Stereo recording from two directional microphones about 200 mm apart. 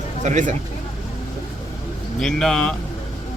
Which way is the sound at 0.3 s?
40° right (ahead or behind).